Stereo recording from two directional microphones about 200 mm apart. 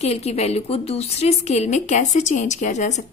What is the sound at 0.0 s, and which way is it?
A woman's voice, 30° left (ahead or behind).